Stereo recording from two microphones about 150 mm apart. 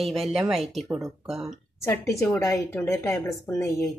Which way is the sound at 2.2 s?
20° left (ahead or behind).